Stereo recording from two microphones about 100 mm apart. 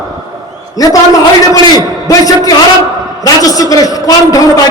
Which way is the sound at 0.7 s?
35° left (ahead or behind).